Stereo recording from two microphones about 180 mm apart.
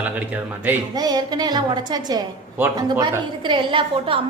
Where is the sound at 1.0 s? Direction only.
20° right (ahead or behind).